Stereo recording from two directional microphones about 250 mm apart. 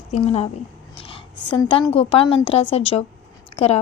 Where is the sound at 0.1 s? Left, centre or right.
Left.